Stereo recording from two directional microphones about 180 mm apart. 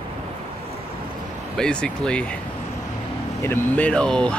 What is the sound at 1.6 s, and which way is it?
Speech, 5° left (ahead or behind).